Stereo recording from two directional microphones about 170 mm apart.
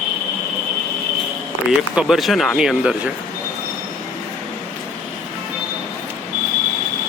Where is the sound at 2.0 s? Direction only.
Centre (ahead or behind).